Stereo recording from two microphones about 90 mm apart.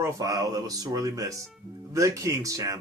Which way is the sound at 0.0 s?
40° right (ahead or behind).